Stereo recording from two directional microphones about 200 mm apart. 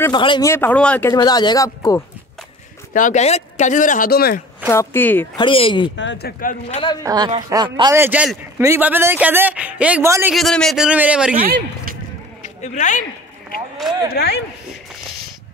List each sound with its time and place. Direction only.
0.0 s speech: 25° left (ahead or behind); by 1.1 s 5° left (ahead or behind)
1.1 s speech: 20° left (ahead or behind)
2.9 s speech: 40° left (ahead or behind)
4.6 s speech: 10° left (ahead or behind)
5.4 s speech: 25° left (ahead or behind)
5.9 s speech: 65° left (ahead or behind)
6.4 s speech: 40° left (ahead or behind)
7.0 s speech: 20° right (ahead or behind)
7.9 s a man's voice: 10° right (ahead or behind)
10.3 s a man's voice: centre (ahead or behind)
11.4 s speech: 50° right (ahead or behind)
12.6 s speech: 40° left (ahead or behind)
14.1 s speech: 55° left (ahead or behind)